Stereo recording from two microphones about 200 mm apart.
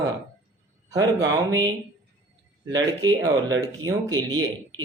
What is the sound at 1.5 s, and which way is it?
Speech, 20° right (ahead or behind).